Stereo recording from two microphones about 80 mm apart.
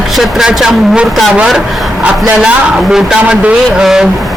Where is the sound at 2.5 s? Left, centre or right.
Centre.